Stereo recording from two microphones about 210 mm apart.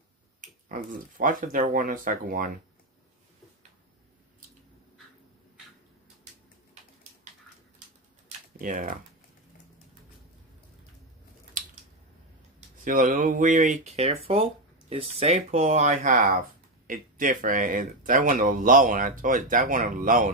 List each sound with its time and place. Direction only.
0.4 s speech: 40° right (ahead or behind)
8.5 s speech: 40° right (ahead or behind)
12.5 s speech: 40° right (ahead or behind)